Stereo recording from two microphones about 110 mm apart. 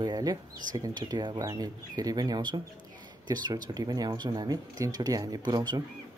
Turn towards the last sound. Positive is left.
turn(degrees=-40)  # may be behind; listen again after turning